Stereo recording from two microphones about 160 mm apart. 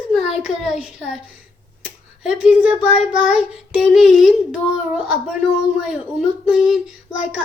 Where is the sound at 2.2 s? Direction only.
5° right (ahead or behind).